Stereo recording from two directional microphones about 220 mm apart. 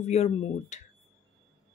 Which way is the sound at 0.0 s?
30° left (ahead or behind).